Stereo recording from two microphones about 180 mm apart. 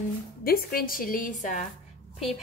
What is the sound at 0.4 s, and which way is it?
A woman's voice, 55° left (ahead or behind).